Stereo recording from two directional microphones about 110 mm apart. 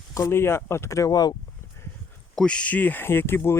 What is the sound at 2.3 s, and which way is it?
Speech, 10° left (ahead or behind).